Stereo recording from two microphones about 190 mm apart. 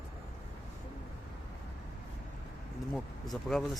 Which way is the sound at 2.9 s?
Centre (ahead or behind).